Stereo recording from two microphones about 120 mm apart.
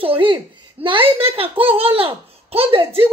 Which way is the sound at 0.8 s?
45° right (ahead or behind).